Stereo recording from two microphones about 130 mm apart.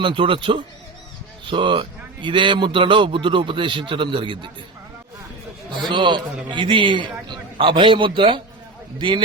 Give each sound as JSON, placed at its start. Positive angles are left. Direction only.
{"t": 0.0, "sound": "a man's voice", "side_deg": -40}
{"t": 5.9, "sound": "a man's voice", "side_deg": -40}